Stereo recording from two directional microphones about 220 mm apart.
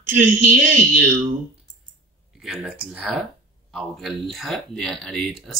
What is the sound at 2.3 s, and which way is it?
Speech, centre (ahead or behind).